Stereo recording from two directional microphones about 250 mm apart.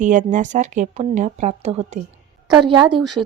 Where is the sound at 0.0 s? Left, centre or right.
Right.